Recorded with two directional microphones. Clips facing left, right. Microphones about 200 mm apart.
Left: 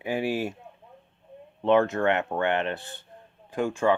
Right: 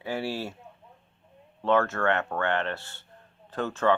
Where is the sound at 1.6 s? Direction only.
15° left (ahead or behind).